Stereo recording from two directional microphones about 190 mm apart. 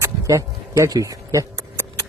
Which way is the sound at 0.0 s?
15° right (ahead or behind).